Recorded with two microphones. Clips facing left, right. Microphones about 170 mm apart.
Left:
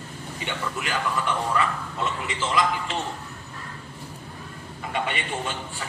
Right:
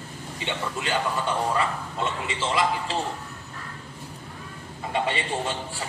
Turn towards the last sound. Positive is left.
turn(degrees=-30)  # may be behind; listen again after turning